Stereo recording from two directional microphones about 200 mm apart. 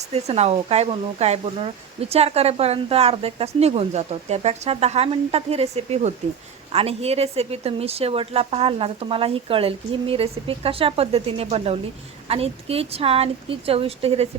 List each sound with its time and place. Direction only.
0.0 s speech: 30° right (ahead or behind)